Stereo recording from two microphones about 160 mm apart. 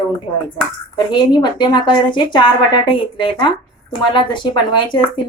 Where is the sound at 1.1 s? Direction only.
30° left (ahead or behind).